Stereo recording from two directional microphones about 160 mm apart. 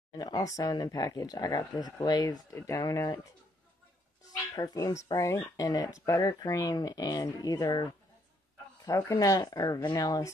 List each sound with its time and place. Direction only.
0.2 s speech: 20° left (ahead or behind)
4.6 s speech: 25° left (ahead or behind)